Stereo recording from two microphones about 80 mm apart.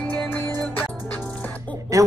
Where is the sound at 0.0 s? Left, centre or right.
Centre.